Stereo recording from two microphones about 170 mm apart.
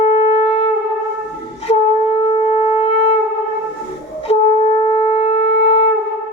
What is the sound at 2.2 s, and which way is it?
Shofar, 35° left (ahead or behind).